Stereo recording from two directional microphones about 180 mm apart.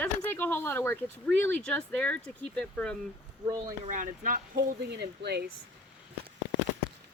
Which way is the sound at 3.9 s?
45° right (ahead or behind).